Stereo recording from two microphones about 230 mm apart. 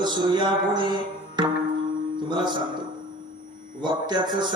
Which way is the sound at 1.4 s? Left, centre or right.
Centre.